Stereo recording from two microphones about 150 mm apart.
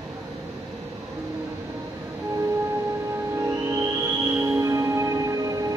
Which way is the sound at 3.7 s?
20° right (ahead or behind).